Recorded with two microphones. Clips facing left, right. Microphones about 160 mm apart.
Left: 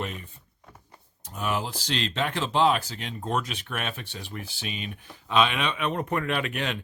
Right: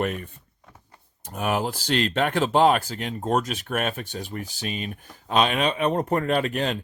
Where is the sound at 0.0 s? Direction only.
55° right (ahead or behind).